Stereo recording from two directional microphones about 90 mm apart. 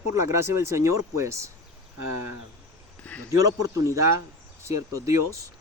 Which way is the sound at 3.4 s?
40° right (ahead or behind).